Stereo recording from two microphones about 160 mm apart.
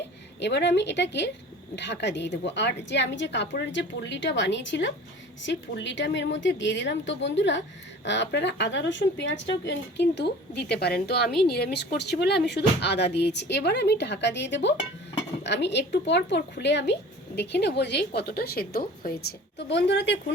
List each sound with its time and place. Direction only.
0.3 s a woman's voice: 90° left